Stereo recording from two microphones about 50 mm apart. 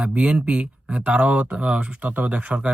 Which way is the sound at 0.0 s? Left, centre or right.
Right.